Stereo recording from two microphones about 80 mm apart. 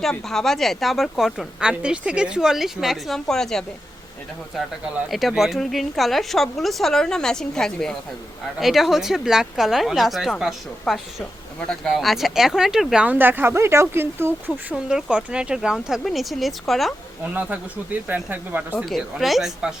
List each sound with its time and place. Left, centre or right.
0.0 s a woman's voice: centre
5.0 s a woman's voice: centre
13.1 s speech: right
14.8 s a woman's voice: centre
18.1 s speech: right
18.9 s a woman's voice: centre